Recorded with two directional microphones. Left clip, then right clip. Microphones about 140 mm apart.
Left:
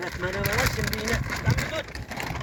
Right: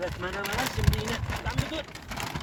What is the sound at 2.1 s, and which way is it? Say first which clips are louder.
Vehicle: left 2 dB; 30° right (ahead or behind).